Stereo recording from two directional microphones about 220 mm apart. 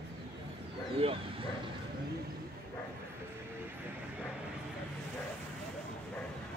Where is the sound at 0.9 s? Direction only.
25° right (ahead or behind).